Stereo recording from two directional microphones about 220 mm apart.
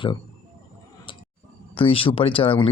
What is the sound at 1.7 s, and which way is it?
Speech, 25° left (ahead or behind).